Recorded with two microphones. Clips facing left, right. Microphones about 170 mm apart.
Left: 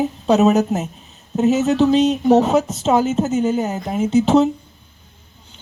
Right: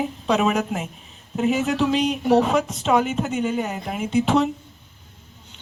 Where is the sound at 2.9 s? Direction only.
30° left (ahead or behind).